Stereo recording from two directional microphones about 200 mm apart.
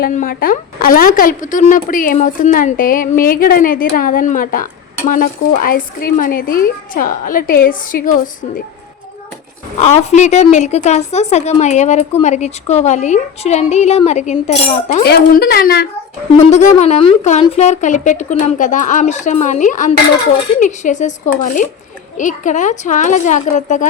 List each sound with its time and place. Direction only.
0.0 s a woman's voice: 45° left (ahead or behind)
9.8 s a woman's voice: 35° left (ahead or behind)
15.0 s a woman's voice: 50° left (ahead or behind)
16.4 s a woman's voice: 35° left (ahead or behind)